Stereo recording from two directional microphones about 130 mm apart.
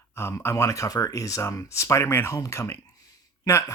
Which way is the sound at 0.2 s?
20° left (ahead or behind).